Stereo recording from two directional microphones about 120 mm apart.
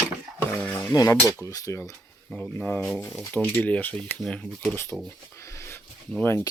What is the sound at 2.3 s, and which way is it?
Speech, 10° left (ahead or behind).